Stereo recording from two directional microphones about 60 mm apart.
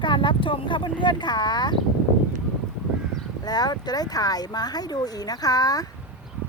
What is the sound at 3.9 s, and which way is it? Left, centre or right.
Speech, left.